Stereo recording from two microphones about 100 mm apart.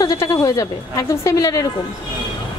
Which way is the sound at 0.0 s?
35° left (ahead or behind).